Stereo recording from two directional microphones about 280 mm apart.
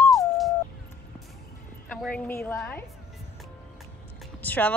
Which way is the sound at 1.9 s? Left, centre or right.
Centre.